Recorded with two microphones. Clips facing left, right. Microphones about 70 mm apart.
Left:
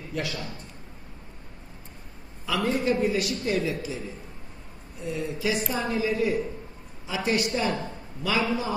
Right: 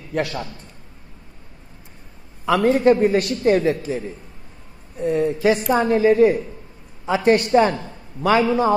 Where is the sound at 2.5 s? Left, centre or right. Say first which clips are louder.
Right 10 dB; right.